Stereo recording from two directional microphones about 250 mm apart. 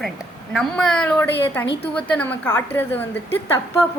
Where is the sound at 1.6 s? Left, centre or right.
Left.